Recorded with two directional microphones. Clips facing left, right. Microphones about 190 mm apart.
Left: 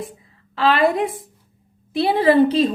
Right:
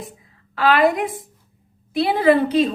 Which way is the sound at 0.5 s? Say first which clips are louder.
Even; 25° left (ahead or behind).